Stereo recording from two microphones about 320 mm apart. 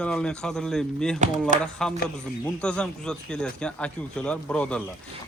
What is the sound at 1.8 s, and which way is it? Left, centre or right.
Speech, centre.